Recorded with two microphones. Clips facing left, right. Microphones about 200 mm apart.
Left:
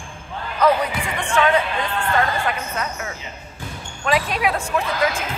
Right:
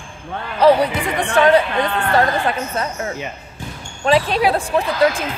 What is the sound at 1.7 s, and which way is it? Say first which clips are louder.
Music: right 5 dB; 65° right (ahead or behind).